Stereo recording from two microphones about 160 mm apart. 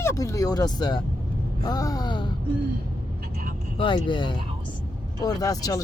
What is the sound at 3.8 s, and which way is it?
Speech, 30° left (ahead or behind).